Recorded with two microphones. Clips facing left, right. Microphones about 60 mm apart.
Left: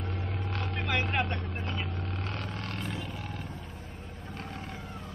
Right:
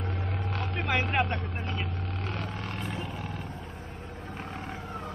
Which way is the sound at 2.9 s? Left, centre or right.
Right.